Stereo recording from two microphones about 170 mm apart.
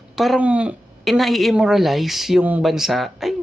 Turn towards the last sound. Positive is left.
turn(degrees=0)  # may be behind; listen again after turning